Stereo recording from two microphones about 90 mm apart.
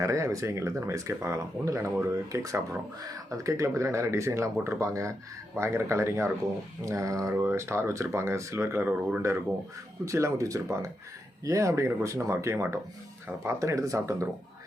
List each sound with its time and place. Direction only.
0.0 s speech: 35° right (ahead or behind)
10.1 s speech: 35° right (ahead or behind)